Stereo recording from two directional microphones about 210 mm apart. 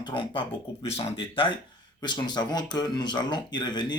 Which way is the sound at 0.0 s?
25° left (ahead or behind).